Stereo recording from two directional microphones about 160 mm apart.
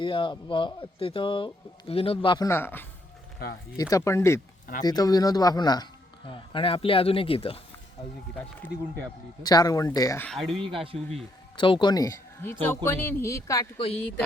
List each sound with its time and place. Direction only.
0.0 s speech: 30° left (ahead or behind)
2.5 s speech: 15° left (ahead or behind); by 7.6 s 35° left (ahead or behind)
9.4 s speech: 25° left (ahead or behind)
10.2 s speech: centre (ahead or behind)
10.7 s speech: 35° right (ahead or behind)
11.5 s speech: 30° left (ahead or behind)